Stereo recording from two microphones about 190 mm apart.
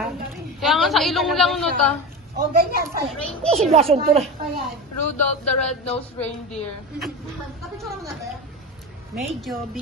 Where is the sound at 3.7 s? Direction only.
30° right (ahead or behind).